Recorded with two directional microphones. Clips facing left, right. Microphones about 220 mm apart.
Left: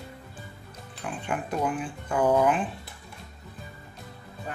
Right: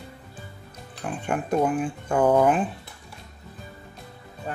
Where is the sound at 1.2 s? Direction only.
45° right (ahead or behind).